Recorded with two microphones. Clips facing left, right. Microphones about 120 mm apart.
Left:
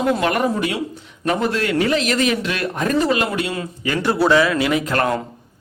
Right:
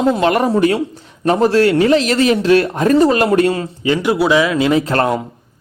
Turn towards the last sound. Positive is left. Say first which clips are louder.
# right 5 dB
turn(degrees=-30)  # may be behind; listen again after turning